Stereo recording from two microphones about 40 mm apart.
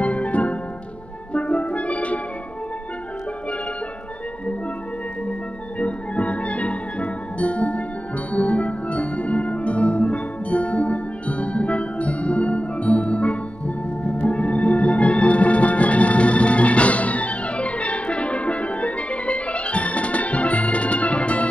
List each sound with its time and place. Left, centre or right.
0.0 s music: left
5.8 s music: left